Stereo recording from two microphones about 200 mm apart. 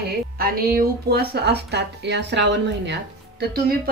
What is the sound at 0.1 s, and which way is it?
Speech, 50° right (ahead or behind).